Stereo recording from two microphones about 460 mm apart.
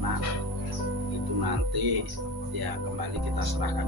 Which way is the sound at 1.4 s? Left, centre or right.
Right.